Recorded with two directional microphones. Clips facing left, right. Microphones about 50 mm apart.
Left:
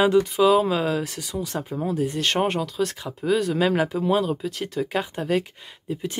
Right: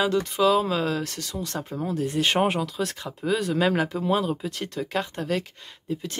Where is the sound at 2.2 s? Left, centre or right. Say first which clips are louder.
Right 3 dB; centre.